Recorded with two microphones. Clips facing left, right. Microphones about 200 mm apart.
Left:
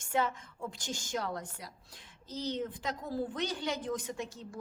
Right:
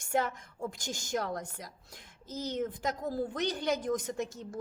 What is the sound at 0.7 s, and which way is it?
A woman's voice, 40° right (ahead or behind).